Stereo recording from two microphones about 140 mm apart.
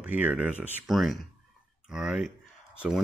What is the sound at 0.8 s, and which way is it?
Speech, centre (ahead or behind).